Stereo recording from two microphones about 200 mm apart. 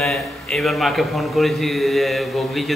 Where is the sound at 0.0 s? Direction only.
Centre (ahead or behind).